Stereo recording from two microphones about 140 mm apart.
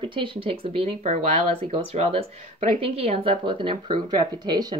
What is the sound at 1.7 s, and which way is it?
Speech, 45° right (ahead or behind).